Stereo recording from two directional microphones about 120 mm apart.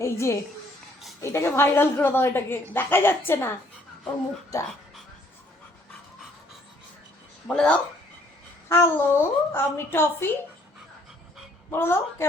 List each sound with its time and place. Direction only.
0.0 s a woman's voice: 25° left (ahead or behind)
7.4 s speech: 5° left (ahead or behind)
8.7 s a woman's voice: 20° left (ahead or behind)
11.7 s a woman's voice: 20° left (ahead or behind)